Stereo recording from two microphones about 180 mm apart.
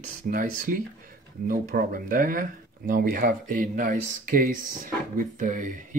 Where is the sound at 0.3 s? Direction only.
50° right (ahead or behind).